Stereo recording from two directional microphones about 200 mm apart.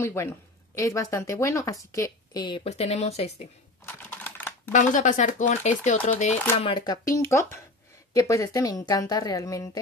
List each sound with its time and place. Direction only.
0.0 s speech: 15° left (ahead or behind); by 3.4 s 30° left (ahead or behind)
3.8 s typing: 10° left (ahead or behind)
4.7 s speech: 40° left (ahead or behind); by 9.7 s 15° left (ahead or behind)